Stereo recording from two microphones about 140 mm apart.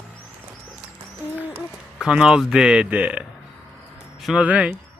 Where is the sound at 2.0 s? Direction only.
5° right (ahead or behind).